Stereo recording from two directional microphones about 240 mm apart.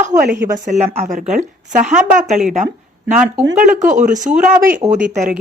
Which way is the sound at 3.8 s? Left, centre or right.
Right.